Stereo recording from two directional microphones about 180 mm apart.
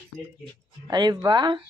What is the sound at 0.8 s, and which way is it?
Speech, 25° right (ahead or behind).